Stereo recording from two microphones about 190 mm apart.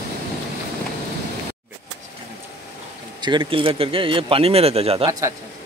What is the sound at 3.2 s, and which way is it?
Speech, 25° right (ahead or behind).